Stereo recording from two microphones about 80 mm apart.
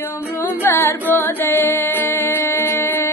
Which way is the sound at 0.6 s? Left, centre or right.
Left.